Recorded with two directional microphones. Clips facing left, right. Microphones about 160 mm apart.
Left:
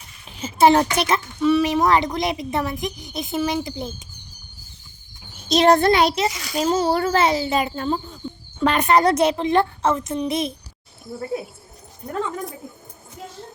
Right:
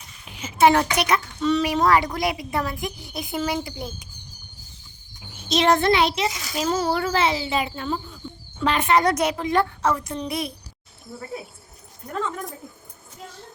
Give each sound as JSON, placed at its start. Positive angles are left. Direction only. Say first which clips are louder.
{"t": 0.3, "sound": "a child's voice", "louder": "left 2 dB", "side_deg": 30}
{"t": 1.4, "sound": "speech", "louder": "left 6 dB", "side_deg": 10}
{"t": 1.6, "sound": "a woman's voice", "louder": "left 1 dB", "side_deg": 20}
{"t": 5.5, "sound": "a child's voice", "louder": "left 4 dB", "side_deg": 35}
{"t": 7.0, "sound": "a child's voice", "louder": "left 3 dB", "side_deg": 45}